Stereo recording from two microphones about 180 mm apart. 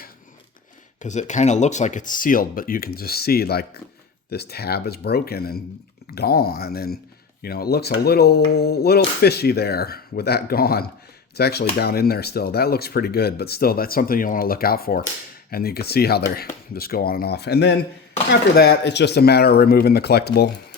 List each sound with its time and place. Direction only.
1.0 s speech: 40° left (ahead or behind); by 20.5 s 65° left (ahead or behind)